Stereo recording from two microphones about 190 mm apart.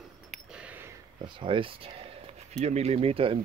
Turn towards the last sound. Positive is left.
turn(degrees=-30)  # may be behind; listen again after turning